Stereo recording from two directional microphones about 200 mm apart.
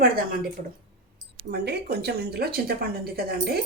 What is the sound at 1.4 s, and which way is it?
Speech, 50° right (ahead or behind).